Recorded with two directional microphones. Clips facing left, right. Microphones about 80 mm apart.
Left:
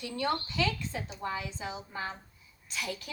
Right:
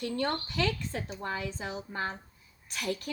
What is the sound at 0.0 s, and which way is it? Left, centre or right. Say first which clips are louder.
A woman's voice: right 1 dB; right.